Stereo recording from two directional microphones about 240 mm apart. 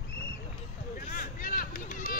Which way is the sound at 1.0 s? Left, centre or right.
Left.